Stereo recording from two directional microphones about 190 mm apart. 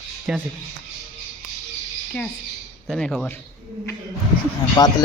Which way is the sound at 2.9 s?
5° left (ahead or behind).